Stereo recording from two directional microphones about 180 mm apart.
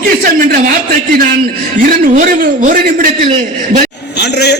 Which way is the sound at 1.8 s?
45° right (ahead or behind).